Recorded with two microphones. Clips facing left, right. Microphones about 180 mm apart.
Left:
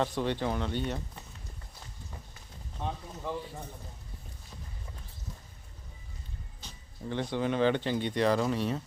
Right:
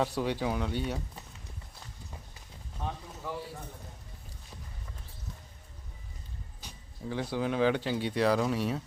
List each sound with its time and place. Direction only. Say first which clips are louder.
0.0 s speech: even; 5° right (ahead or behind)
6.6 s a sound: right 1 dB; 15° right (ahead or behind)
7.0 s speech: left 1 dB; 5° right (ahead or behind)